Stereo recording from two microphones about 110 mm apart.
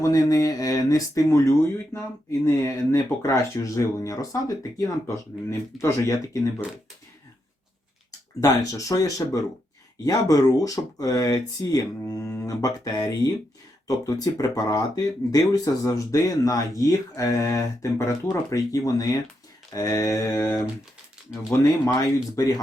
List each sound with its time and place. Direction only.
0.0 s speech: 35° left (ahead or behind)
5.8 s mantra: 30° left (ahead or behind)
8.4 s speech: 30° left (ahead or behind)
19.7 s mantra: 30° left (ahead or behind)
21.6 s speech: 30° left (ahead or behind)